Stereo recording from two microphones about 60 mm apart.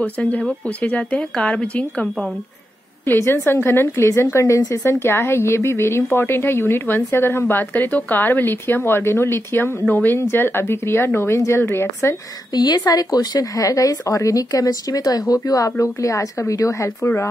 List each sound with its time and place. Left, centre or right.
0.0 s speech: left
3.1 s a woman's voice: left
4.7 s a woman's voice: left
9.8 s speech: left
10.1 s a woman's voice: left
12.7 s speech: left
15.8 s a woman's voice: left
17.0 s a woman's voice: left